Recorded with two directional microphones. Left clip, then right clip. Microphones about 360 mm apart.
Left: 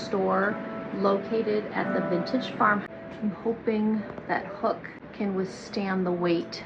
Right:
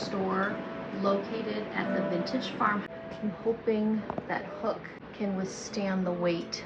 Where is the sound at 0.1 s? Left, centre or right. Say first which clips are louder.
Left 7 dB; centre.